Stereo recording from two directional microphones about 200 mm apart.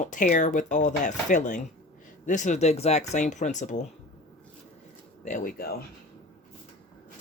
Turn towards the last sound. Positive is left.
turn(degrees=45)  # may be behind; listen again after turning